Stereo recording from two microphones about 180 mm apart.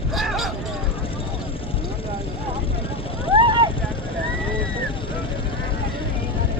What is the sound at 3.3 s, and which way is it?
Vehicle, 30° right (ahead or behind).